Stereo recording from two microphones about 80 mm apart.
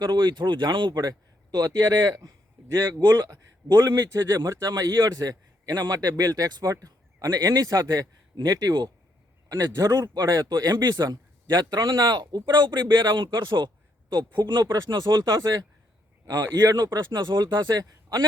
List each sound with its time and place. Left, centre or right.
0.0 s speech: right
3.1 s a man's voice: right
9.5 s a man's voice: right
10.5 s speech: right
12.5 s speech: right